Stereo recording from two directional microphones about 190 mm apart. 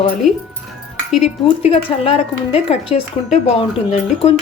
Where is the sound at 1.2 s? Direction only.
30° left (ahead or behind).